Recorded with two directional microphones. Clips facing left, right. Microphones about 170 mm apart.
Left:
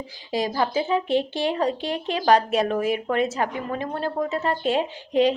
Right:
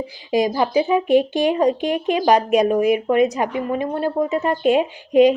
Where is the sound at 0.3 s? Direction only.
15° right (ahead or behind).